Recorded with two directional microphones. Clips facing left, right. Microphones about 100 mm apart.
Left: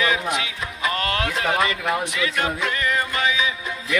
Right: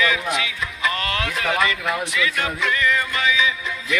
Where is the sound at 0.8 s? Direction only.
30° left (ahead or behind).